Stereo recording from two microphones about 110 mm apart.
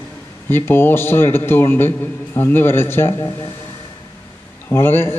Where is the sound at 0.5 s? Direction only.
20° left (ahead or behind).